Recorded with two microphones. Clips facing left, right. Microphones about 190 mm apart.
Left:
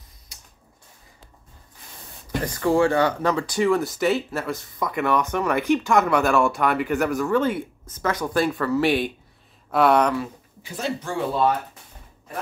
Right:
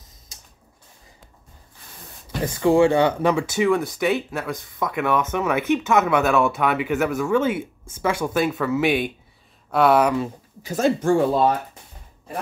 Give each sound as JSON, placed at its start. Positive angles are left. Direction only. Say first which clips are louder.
{"t": 2.4, "sound": "speech", "louder": "right 3 dB", "side_deg": -20}
{"t": 10.6, "sound": "speech", "louder": "right 8 dB", "side_deg": -45}